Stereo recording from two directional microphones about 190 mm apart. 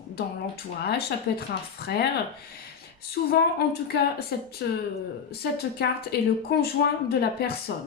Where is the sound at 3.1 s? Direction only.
55° left (ahead or behind).